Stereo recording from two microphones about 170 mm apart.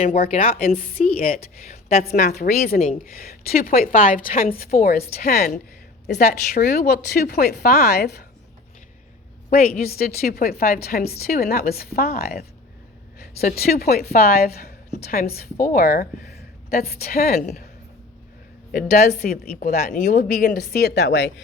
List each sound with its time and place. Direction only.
0.0 s a woman's voice: 45° left (ahead or behind); by 5.5 s 65° left (ahead or behind)
6.1 s a woman's voice: 45° left (ahead or behind)
6.5 s speech: 65° left (ahead or behind)
9.5 s a woman's voice: 60° left (ahead or behind)
18.7 s a woman's voice: 50° left (ahead or behind)
19.3 s a woman's voice: 65° left (ahead or behind)
20.0 s speech: 50° left (ahead or behind); by 21.4 s 85° left